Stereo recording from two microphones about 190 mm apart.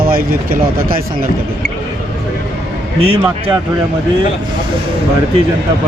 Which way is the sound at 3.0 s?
30° right (ahead or behind).